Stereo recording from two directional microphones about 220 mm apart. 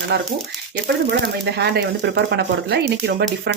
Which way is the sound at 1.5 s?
50° right (ahead or behind).